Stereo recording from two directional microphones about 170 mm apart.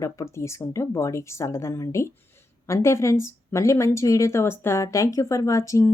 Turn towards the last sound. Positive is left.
turn(degrees=20)  # may be behind; listen again after turning